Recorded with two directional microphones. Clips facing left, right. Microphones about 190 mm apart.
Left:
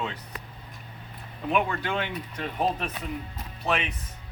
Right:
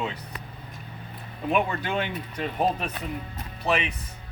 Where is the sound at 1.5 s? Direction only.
15° right (ahead or behind).